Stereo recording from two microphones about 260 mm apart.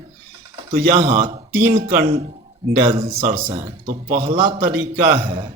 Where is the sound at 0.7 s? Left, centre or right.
Right.